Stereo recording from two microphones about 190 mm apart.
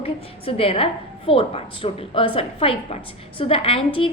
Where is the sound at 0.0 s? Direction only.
30° left (ahead or behind).